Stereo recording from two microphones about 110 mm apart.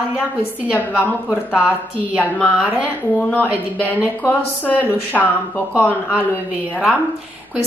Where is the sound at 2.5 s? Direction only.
15° right (ahead or behind).